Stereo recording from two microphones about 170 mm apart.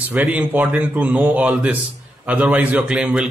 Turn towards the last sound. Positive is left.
turn(degrees=-5)  # may be behind; listen again after turning